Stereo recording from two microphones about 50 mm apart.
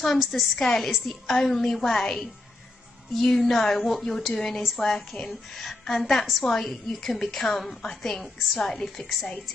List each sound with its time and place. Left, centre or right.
0.0 s a woman's voice: centre